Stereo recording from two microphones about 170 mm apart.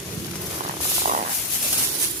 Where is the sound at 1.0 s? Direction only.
45° right (ahead or behind).